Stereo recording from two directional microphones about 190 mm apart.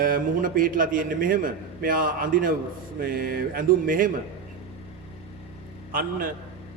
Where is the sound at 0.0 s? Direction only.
50° right (ahead or behind).